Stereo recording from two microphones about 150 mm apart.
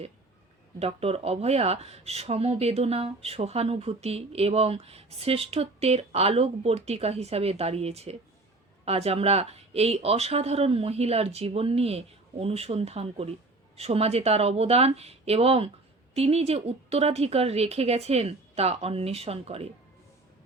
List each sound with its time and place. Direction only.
0.8 s speech: 45° right (ahead or behind)